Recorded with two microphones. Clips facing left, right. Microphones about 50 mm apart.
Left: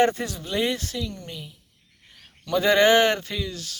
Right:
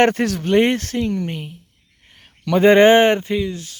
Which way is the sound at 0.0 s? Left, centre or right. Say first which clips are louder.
Right 6 dB; right.